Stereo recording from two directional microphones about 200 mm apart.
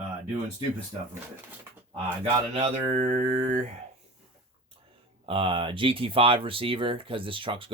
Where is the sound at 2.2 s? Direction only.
30° right (ahead or behind).